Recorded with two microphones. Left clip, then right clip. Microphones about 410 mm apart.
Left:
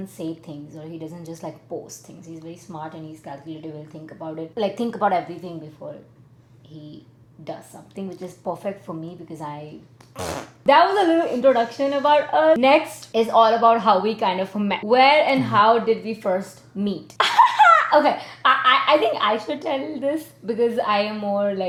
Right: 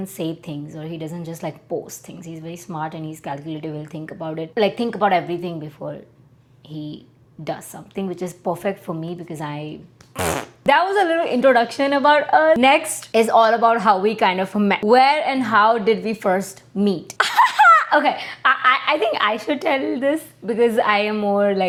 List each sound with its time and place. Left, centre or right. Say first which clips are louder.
0.2 s speech: right 4 dB; right
7.4 s speech: right 6 dB; right